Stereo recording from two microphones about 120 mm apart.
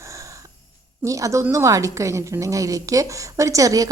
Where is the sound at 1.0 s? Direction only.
25° right (ahead or behind).